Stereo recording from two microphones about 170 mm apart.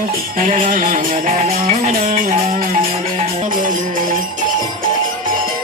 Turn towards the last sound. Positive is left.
turn(degrees=-50)  # may be behind; listen again after turning